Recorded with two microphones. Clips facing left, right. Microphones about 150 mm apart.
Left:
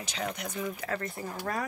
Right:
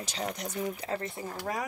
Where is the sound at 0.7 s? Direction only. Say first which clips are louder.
Even; 25° right (ahead or behind).